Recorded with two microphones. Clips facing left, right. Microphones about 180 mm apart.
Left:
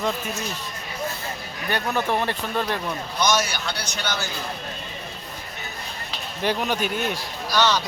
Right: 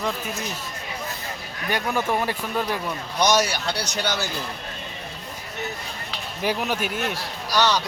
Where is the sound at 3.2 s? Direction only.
35° right (ahead or behind).